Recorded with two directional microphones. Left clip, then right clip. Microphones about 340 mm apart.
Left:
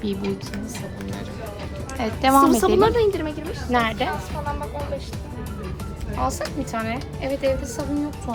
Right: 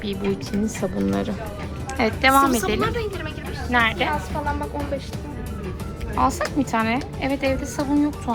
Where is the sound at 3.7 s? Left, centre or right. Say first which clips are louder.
Right 2 dB; centre.